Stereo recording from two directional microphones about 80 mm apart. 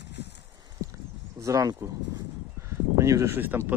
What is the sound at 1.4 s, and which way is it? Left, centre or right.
Speech, right.